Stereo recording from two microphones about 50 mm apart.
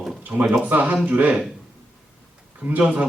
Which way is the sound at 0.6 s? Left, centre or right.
Right.